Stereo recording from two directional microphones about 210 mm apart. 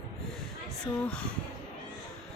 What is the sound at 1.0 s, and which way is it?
Speech, 5° left (ahead or behind).